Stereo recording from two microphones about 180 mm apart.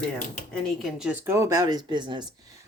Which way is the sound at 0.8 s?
5° right (ahead or behind).